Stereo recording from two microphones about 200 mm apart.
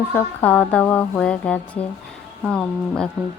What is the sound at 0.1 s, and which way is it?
Music, 10° left (ahead or behind).